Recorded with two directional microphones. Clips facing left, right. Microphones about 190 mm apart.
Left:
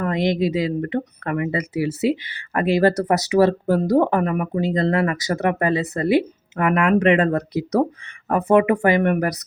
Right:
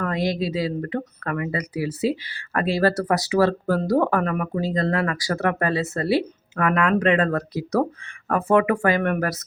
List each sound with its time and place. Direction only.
0.0 s speech: 20° left (ahead or behind)